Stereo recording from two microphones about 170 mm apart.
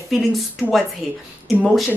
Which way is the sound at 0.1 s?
Centre (ahead or behind).